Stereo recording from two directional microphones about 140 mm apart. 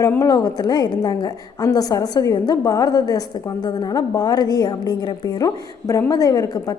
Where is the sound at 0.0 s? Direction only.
25° left (ahead or behind).